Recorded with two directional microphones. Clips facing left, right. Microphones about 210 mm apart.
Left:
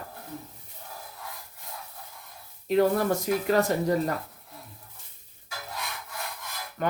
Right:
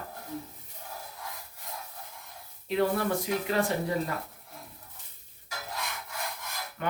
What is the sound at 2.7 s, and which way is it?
Speech, 40° left (ahead or behind).